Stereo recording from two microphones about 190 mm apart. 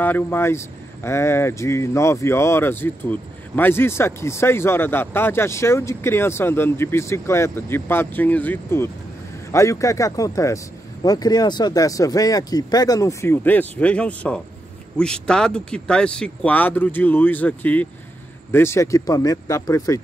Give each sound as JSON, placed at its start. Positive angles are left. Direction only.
{"t": 0.0, "sound": "speech", "side_deg": 10}